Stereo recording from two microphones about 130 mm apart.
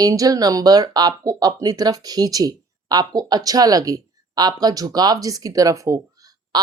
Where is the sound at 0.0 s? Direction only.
30° right (ahead or behind).